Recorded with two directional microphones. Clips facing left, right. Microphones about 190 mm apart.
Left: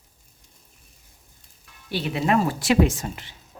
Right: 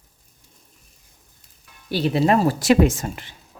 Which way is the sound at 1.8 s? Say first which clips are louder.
Right 5 dB; 35° right (ahead or behind).